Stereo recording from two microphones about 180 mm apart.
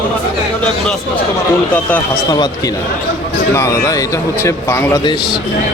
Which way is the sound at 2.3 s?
20° left (ahead or behind).